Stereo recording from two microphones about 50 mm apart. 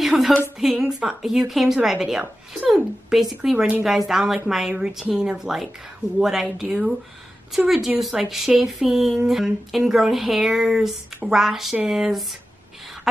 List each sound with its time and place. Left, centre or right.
0.0 s a sound: centre
0.6 s a woman's voice: centre
6.4 s speech: centre
7.5 s a woman's voice: centre